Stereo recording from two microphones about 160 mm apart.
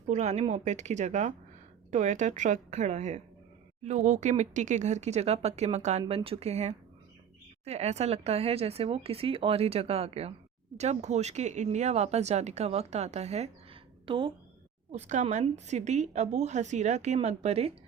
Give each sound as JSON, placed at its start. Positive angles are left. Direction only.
{"t": 0.1, "sound": "a woman's voice", "side_deg": -45}
{"t": 14.9, "sound": "speech", "side_deg": -50}